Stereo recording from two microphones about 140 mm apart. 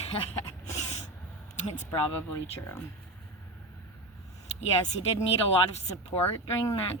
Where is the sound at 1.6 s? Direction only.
60° left (ahead or behind).